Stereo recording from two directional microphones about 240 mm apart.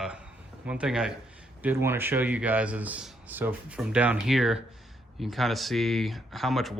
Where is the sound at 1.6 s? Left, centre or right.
Centre.